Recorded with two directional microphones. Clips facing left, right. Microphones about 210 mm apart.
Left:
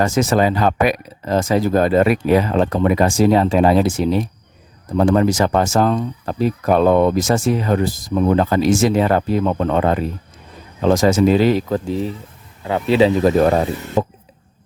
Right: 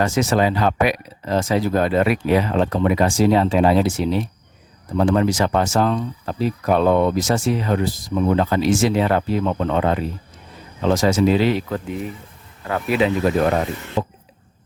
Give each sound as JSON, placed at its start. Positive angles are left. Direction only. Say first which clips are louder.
{"t": 0.0, "sound": "speech", "louder": "left 2 dB", "side_deg": 50}
{"t": 14.0, "sound": "speech", "louder": "left 4 dB", "side_deg": 50}